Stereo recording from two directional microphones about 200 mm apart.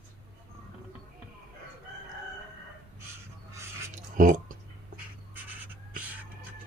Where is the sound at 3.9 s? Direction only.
40° right (ahead or behind).